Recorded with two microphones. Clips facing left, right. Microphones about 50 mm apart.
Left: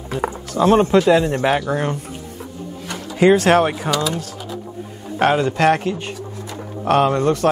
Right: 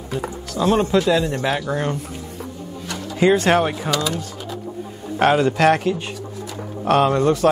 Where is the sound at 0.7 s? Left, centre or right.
Left.